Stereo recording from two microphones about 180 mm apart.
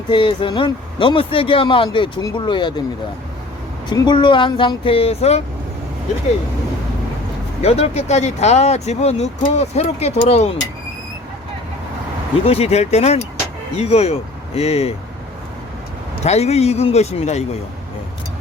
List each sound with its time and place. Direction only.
0.1 s speech: 30° left (ahead or behind)
3.8 s speech: 25° left (ahead or behind)
7.6 s speech: 35° left (ahead or behind)
12.5 s speech: 35° left (ahead or behind)
16.2 s speech: 35° left (ahead or behind)